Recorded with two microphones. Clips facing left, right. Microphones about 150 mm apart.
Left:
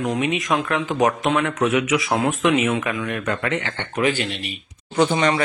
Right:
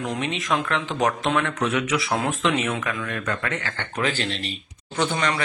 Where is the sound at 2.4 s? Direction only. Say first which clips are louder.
Left 5 dB; 20° left (ahead or behind).